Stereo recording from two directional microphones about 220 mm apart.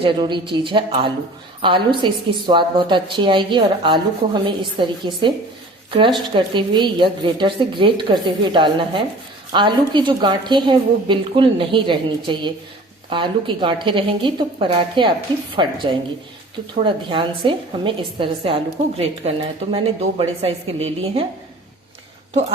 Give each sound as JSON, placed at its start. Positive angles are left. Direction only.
{"t": 0.0, "sound": "a woman's voice", "side_deg": -20}